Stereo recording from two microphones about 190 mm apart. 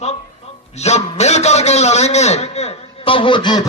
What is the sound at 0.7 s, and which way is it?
A man's voice, 35° left (ahead or behind).